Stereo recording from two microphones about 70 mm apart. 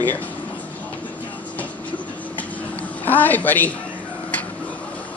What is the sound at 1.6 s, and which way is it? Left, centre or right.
Train, left.